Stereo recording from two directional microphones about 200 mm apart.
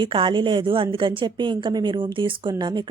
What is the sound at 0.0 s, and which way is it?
A woman's voice, 25° right (ahead or behind).